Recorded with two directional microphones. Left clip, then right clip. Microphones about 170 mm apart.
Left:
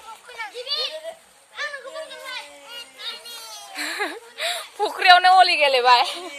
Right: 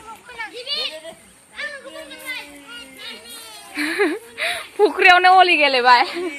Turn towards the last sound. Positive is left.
turn(degrees=-25)  # may be behind; listen again after turning